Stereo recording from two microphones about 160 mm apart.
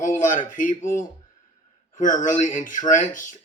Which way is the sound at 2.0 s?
55° left (ahead or behind).